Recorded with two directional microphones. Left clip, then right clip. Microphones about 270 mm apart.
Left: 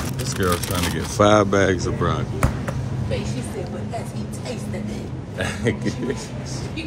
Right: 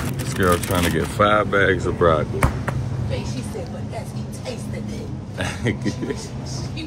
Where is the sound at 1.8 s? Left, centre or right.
Centre.